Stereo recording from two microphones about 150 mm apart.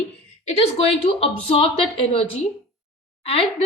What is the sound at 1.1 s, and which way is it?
A woman's voice, 40° left (ahead or behind).